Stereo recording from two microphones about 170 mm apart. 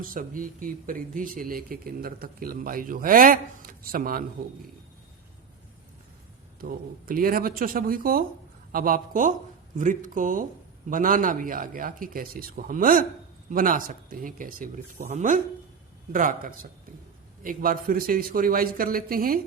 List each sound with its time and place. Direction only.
0.0 s speech: 55° right (ahead or behind)
6.6 s speech: 60° right (ahead or behind)